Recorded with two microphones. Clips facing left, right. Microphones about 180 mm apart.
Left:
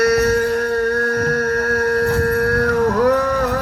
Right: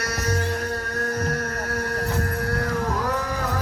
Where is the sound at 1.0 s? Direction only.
65° left (ahead or behind).